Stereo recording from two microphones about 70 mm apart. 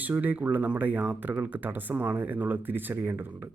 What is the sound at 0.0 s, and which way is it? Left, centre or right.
Speech, right.